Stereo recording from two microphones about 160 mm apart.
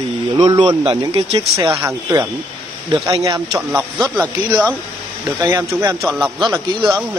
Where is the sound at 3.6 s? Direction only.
10° right (ahead or behind).